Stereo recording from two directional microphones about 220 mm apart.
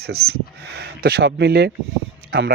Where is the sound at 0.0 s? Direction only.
45° right (ahead or behind).